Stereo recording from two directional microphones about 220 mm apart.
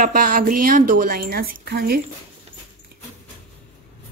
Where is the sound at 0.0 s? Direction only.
40° right (ahead or behind).